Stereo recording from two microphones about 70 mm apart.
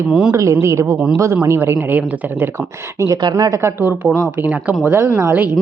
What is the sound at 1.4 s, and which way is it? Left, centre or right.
Speech, right.